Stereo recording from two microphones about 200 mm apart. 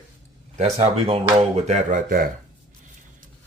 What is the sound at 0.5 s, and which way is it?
Speech, 35° right (ahead or behind).